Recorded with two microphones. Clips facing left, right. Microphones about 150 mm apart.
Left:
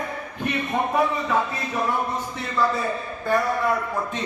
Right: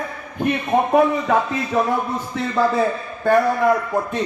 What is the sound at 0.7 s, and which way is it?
Speech, 55° right (ahead or behind).